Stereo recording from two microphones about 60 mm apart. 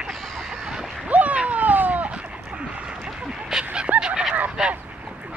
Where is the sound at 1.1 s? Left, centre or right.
Right.